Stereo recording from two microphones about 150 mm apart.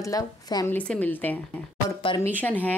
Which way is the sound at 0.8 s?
10° left (ahead or behind).